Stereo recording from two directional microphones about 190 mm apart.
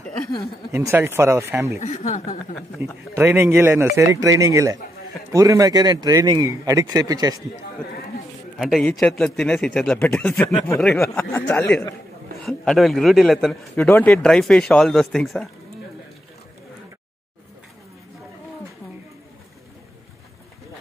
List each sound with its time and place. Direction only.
0.7 s a man's voice: 15° right (ahead or behind)
1.8 s speech: 35° left (ahead or behind)
2.8 s a man's voice: 15° right (ahead or behind)
8.5 s a man's voice: centre (ahead or behind)